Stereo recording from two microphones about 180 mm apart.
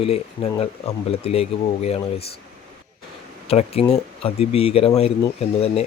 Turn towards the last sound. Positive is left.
turn(degrees=35)  # may be behind; listen again after turning